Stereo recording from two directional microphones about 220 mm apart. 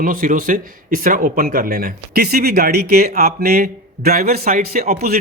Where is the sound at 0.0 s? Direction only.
40° right (ahead or behind).